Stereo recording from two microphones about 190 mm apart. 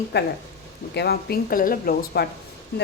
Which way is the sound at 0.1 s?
60° left (ahead or behind).